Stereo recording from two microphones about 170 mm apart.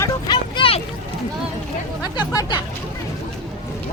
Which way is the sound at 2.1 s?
25° left (ahead or behind).